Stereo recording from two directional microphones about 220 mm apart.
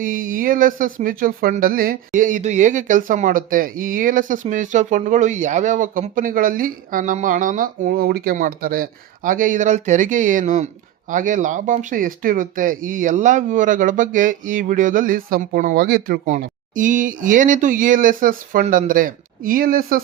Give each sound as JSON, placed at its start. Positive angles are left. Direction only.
{"t": 0.0, "sound": "speech", "side_deg": -40}